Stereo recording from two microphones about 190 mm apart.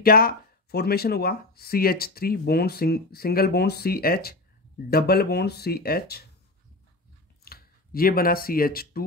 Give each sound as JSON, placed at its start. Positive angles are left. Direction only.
{"t": 0.0, "sound": "speech", "side_deg": 50}
{"t": 7.4, "sound": "speech", "side_deg": 50}